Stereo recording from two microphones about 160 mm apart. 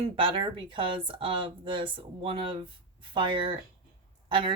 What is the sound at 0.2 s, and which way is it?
Speech, 30° right (ahead or behind).